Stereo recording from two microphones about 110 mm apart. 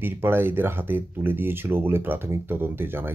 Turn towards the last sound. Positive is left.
turn(degrees=-20)  # may be behind; listen again after turning